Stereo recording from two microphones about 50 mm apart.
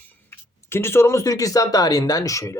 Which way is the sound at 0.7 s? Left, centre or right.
Left.